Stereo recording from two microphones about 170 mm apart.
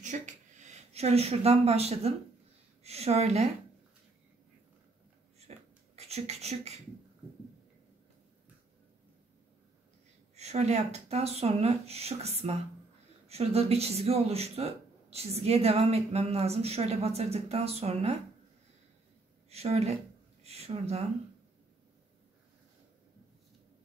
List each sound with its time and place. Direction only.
0.0 s a sound: 45° right (ahead or behind)
2.8 s a woman's voice: 40° right (ahead or behind)
5.5 s a sound: 40° right (ahead or behind)
5.9 s speech: 40° right (ahead or behind)
10.3 s speech: 40° right (ahead or behind)
19.5 s speech: 40° right (ahead or behind)